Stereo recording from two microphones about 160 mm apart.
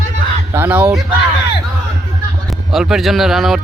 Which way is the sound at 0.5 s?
10° right (ahead or behind).